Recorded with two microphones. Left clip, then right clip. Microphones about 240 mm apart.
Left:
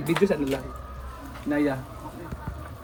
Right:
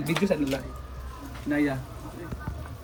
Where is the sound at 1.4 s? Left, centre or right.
Centre.